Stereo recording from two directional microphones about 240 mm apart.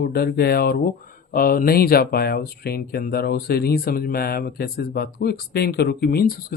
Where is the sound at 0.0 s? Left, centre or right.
Left.